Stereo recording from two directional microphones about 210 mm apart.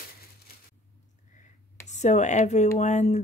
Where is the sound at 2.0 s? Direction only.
35° left (ahead or behind).